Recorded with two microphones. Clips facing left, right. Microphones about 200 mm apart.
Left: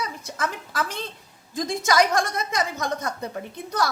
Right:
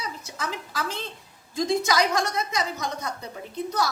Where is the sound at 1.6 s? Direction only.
50° left (ahead or behind).